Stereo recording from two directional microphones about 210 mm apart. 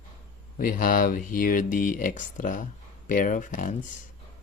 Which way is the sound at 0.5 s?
40° left (ahead or behind).